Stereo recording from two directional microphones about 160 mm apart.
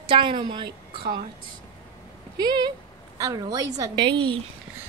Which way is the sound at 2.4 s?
25° right (ahead or behind).